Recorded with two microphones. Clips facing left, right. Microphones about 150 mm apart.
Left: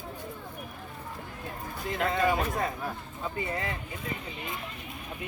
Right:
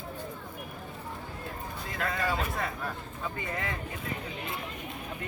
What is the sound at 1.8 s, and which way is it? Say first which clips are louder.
Speech: left 5 dB; 25° left (ahead or behind).